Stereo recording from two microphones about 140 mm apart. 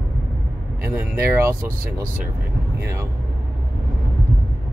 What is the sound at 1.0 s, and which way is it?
Speech, 15° right (ahead or behind).